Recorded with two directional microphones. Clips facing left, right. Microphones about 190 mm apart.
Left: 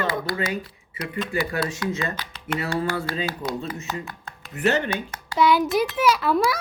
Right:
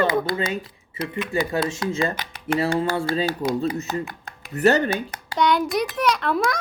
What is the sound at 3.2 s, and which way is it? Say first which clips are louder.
Speech: right 5 dB; 35° right (ahead or behind).